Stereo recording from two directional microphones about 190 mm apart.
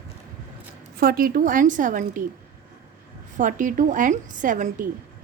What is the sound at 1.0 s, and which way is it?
A woman's voice, 50° right (ahead or behind).